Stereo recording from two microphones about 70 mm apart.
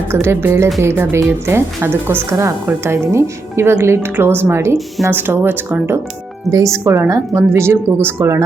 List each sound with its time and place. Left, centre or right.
0.1 s a woman's voice: right
5.1 s a woman's voice: right
6.5 s speech: right
6.8 s a woman's voice: right